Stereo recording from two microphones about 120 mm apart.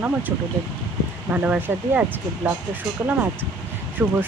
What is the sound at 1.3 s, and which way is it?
Speech, 15° right (ahead or behind).